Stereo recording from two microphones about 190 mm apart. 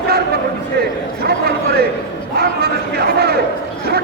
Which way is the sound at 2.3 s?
55° right (ahead or behind).